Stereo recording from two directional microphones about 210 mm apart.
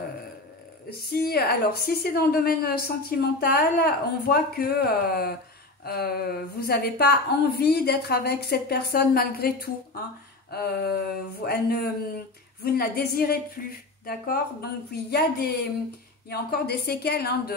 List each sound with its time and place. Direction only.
0.8 s a woman's voice: 45° left (ahead or behind)